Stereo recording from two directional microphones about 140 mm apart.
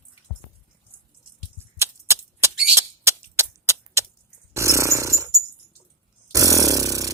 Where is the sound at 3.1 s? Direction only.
20° right (ahead or behind).